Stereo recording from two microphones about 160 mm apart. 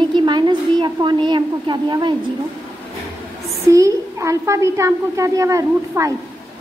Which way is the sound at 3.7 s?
20° right (ahead or behind).